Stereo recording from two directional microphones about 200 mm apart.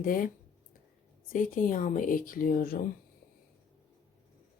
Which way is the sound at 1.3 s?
40° left (ahead or behind).